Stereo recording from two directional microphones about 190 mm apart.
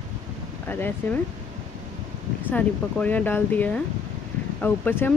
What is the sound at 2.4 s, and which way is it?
Speech, 10° left (ahead or behind).